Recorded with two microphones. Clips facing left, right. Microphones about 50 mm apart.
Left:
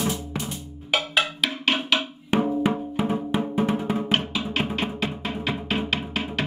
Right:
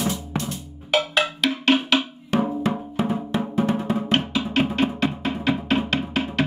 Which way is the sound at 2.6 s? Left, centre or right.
Centre.